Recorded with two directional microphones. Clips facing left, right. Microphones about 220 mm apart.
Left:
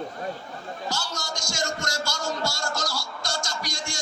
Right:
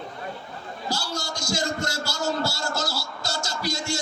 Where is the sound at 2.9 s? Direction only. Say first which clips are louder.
Right 1 dB; 5° right (ahead or behind).